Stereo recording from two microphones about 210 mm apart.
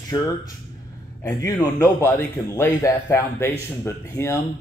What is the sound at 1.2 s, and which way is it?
A man's voice, 10° left (ahead or behind).